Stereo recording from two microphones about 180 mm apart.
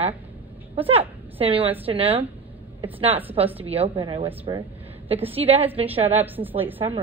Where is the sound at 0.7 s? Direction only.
30° right (ahead or behind).